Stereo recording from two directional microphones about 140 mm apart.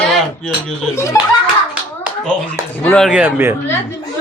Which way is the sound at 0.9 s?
20° left (ahead or behind).